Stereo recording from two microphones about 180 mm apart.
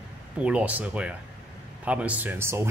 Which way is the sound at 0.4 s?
5° right (ahead or behind).